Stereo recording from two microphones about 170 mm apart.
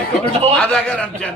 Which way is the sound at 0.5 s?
5° left (ahead or behind).